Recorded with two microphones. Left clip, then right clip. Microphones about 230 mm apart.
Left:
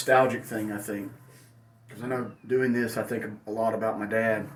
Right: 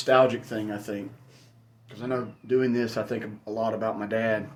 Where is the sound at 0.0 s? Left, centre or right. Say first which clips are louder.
Right 1 dB; centre.